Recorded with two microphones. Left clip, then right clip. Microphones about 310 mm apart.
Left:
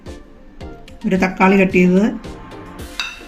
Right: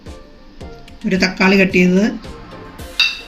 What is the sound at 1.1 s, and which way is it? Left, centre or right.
Speech, left.